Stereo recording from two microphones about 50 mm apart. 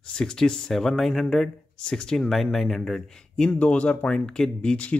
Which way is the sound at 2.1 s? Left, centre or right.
Centre.